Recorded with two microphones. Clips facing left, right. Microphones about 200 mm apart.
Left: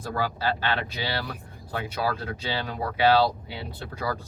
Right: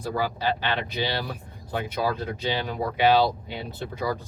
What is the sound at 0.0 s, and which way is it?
Speech, 15° right (ahead or behind).